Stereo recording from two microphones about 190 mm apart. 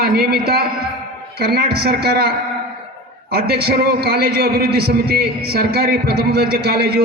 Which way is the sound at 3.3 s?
55° right (ahead or behind).